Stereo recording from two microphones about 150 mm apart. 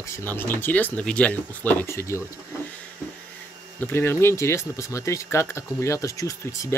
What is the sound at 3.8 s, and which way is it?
Speech, 15° left (ahead or behind).